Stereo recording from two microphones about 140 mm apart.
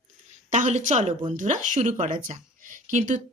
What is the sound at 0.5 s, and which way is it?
Speech, 60° right (ahead or behind).